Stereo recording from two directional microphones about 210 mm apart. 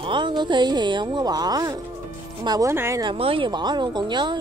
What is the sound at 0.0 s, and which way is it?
Speech, 20° right (ahead or behind).